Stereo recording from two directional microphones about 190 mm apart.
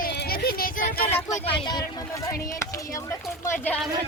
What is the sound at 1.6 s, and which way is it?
Speech, 20° left (ahead or behind).